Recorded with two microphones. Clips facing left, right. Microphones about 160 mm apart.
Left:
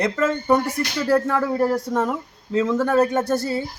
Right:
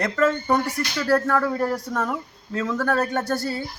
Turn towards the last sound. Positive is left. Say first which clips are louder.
# left 4 dB
turn(degrees=20)  # may be behind; listen again after turning